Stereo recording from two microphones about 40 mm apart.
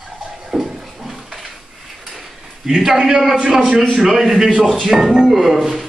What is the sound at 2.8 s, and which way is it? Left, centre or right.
A man's voice, centre.